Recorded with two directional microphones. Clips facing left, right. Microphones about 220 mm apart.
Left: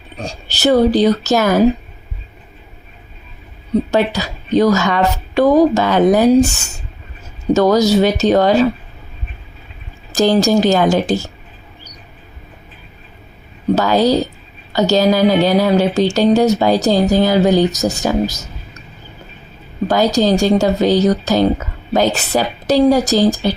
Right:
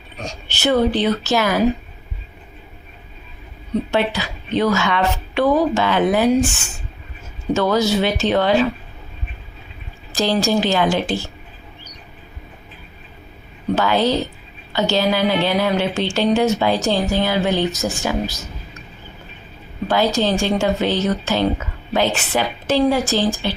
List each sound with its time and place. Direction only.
0.2 s a woman's voice: 35° left (ahead or behind)
3.9 s a woman's voice: 40° left (ahead or behind)
10.1 s a woman's voice: 45° left (ahead or behind)
13.7 s a woman's voice: 40° left (ahead or behind)
19.9 s a woman's voice: 40° left (ahead or behind)